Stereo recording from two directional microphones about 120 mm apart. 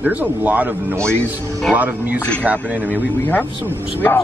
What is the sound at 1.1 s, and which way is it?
Speech, 10° left (ahead or behind).